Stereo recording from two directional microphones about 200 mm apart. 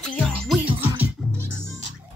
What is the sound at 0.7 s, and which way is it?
Music, 25° right (ahead or behind).